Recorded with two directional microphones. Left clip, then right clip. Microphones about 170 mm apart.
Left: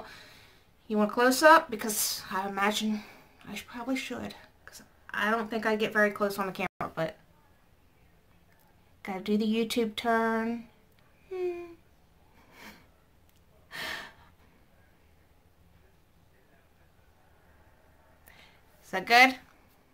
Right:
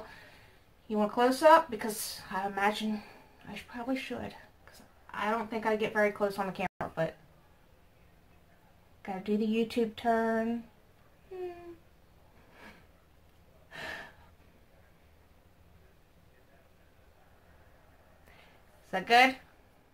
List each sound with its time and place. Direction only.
0.8 s speech: 10° left (ahead or behind)
9.0 s speech: 15° left (ahead or behind)
13.7 s gasp: 10° left (ahead or behind)
18.9 s speech: 5° left (ahead or behind)